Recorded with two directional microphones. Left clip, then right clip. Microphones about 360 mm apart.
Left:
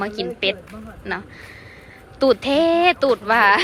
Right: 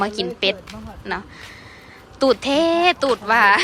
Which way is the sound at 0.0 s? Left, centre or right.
Centre.